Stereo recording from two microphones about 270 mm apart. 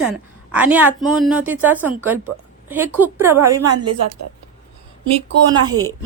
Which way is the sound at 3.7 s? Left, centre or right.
Right.